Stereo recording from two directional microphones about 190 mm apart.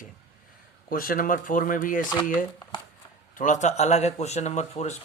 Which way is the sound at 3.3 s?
40° left (ahead or behind).